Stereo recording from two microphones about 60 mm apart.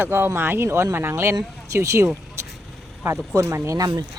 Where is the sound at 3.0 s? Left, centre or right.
Right.